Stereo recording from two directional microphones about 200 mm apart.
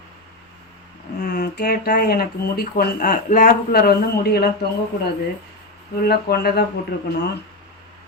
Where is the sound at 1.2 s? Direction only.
50° left (ahead or behind).